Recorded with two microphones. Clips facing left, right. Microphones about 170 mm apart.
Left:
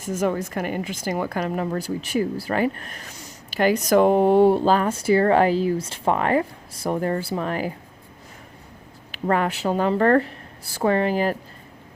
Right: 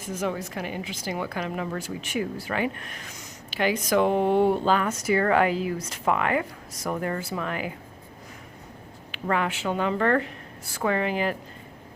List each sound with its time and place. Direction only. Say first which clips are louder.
0.1 s a woman's voice: left 6 dB; 45° left (ahead or behind)
9.1 s a woman's voice: left 4 dB; 40° left (ahead or behind)